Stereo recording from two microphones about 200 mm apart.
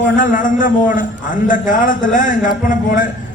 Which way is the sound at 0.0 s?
40° left (ahead or behind).